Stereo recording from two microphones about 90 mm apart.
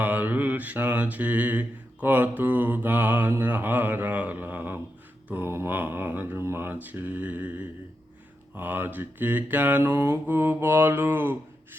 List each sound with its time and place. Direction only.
0.0 s mantra: 20° right (ahead or behind)